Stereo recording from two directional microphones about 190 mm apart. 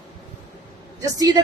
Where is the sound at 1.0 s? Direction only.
20° right (ahead or behind).